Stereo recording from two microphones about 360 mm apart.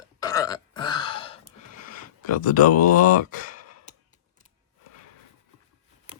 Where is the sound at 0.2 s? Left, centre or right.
Centre.